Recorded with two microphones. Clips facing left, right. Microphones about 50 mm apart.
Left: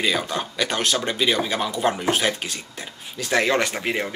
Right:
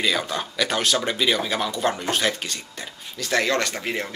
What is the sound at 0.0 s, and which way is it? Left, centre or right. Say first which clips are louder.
Speech: left 1 dB; centre.